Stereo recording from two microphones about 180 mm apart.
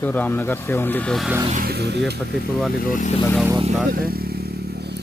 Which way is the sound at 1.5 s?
60° right (ahead or behind).